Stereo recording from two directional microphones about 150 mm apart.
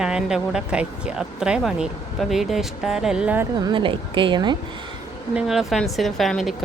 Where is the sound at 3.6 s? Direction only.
35° right (ahead or behind).